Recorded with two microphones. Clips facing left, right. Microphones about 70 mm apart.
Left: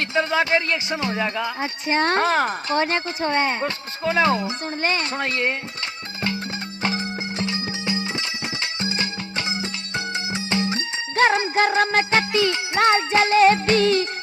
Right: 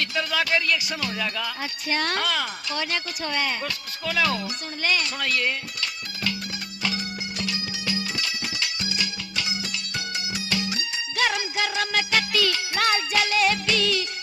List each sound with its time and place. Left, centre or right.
0.0 s speech: left
6.8 s music: left